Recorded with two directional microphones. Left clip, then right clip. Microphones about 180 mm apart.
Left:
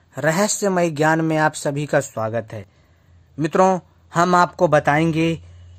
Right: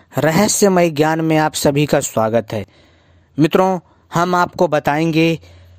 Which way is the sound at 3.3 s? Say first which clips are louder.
Right 2 dB; 50° right (ahead or behind).